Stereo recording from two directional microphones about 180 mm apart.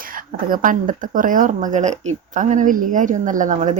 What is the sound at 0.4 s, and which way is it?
Speech, 50° right (ahead or behind).